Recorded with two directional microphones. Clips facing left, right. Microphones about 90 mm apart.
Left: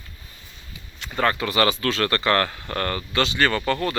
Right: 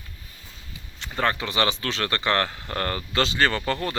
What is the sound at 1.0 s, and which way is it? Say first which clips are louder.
Speech: left 2 dB; 20° right (ahead or behind).